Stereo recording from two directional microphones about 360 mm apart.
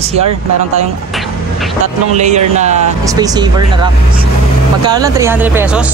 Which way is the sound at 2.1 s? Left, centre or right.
Centre.